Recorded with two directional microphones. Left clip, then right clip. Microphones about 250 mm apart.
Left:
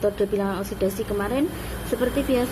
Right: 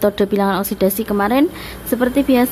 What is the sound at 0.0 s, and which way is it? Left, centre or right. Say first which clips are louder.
A woman's voice: right 7 dB; right.